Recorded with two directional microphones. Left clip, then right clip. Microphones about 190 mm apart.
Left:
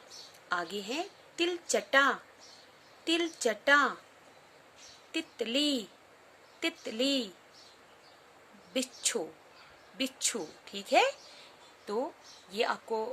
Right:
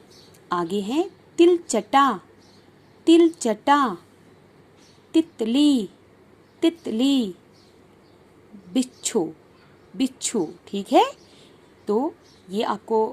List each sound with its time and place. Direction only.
0.4 s a woman's voice: 30° right (ahead or behind)
5.1 s a woman's voice: 25° right (ahead or behind)
8.7 s a woman's voice: 25° right (ahead or behind)